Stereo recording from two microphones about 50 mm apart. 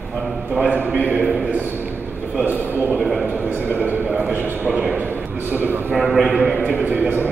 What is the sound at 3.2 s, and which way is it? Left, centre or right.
A man's voice, right.